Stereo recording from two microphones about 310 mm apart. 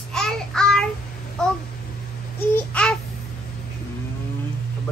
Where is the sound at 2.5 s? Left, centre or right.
Centre.